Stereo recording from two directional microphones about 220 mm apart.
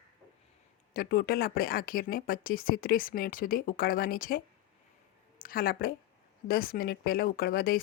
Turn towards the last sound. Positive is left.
turn(degrees=40)  # may be behind; listen again after turning